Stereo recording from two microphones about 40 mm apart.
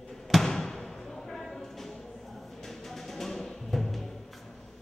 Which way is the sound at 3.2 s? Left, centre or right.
Centre.